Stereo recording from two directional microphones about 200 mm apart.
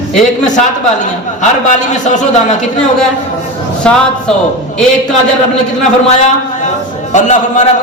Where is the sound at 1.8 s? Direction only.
40° left (ahead or behind).